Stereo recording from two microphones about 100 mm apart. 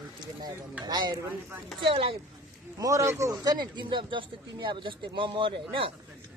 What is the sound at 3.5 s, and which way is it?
Speech, 45° right (ahead or behind).